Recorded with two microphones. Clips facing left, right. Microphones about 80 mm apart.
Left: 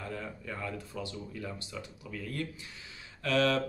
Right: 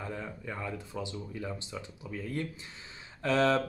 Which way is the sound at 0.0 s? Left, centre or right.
Centre.